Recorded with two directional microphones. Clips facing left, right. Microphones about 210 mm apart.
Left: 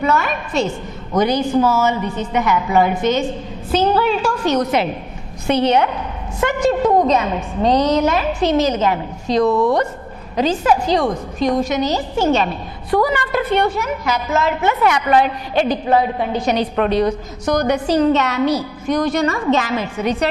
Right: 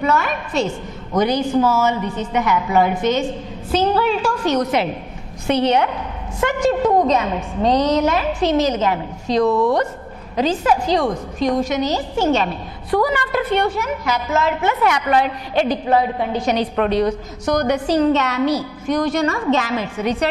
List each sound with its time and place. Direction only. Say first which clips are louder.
0.0 s a woman's voice: left 1 dB; 15° left (ahead or behind)
9.5 s a woman's voice: left 1 dB; 35° left (ahead or behind)
10.3 s a woman's voice: left 1 dB; 10° left (ahead or behind)